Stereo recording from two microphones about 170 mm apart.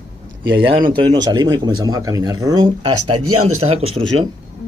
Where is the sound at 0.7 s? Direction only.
30° right (ahead or behind).